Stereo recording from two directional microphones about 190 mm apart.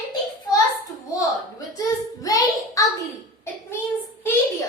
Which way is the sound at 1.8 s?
20° left (ahead or behind).